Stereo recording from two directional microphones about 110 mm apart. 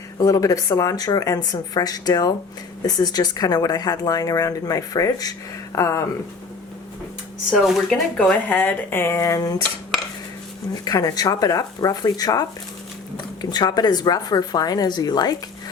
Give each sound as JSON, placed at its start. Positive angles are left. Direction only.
{"t": 0.3, "sound": "speech", "side_deg": 30}
{"t": 7.9, "sound": "speech", "side_deg": 10}
{"t": 10.8, "sound": "speech", "side_deg": 35}